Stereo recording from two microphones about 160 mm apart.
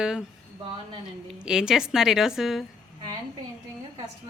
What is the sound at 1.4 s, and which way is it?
A woman's voice, 5° right (ahead or behind).